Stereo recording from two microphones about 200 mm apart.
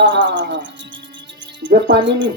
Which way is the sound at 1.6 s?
65° right (ahead or behind).